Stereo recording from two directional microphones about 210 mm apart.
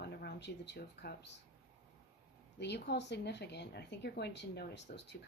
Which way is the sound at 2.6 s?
55° left (ahead or behind).